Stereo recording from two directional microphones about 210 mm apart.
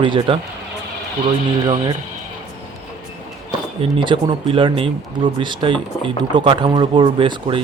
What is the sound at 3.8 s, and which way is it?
Speech, 25° right (ahead or behind).